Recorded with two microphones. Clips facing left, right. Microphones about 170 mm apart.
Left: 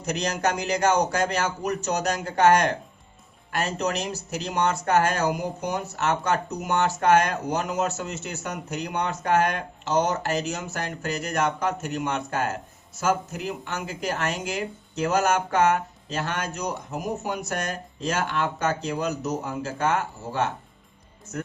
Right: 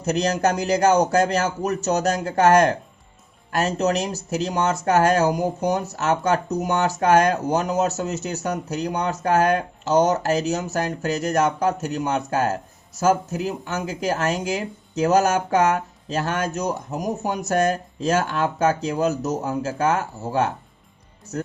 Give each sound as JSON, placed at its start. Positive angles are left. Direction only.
{"t": 0.0, "sound": "speech", "side_deg": -35}